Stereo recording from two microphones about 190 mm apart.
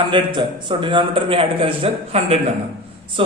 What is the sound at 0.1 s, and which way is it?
A man's voice, 25° right (ahead or behind).